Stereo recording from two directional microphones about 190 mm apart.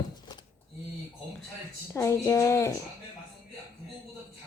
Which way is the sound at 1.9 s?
15° left (ahead or behind).